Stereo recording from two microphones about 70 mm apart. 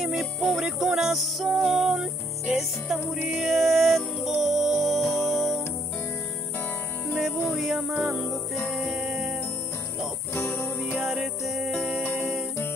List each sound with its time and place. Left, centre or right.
0.0 s music: centre
0.7 s music: centre
7.4 s music: centre
8.5 s music: left
8.8 s music: centre
10.3 s music: left
11.1 s music: centre
12.0 s music: left